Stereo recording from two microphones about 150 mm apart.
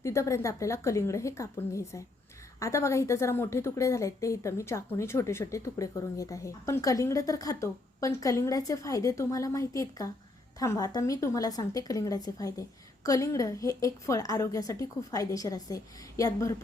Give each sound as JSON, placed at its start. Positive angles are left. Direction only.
{"t": 0.0, "sound": "a woman's voice", "side_deg": 20}